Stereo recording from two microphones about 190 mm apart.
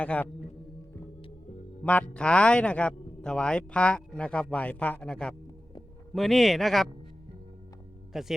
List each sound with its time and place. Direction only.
0.0 s speech: 10° left (ahead or behind)
1.8 s a man's voice: 5° left (ahead or behind)
8.1 s a man's voice: centre (ahead or behind)